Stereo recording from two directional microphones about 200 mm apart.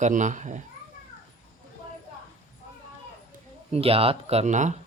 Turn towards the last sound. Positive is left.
turn(degrees=-35)  # may be behind; listen again after turning